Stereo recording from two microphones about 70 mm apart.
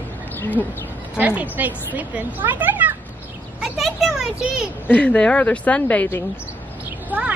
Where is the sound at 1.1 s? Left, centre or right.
Right.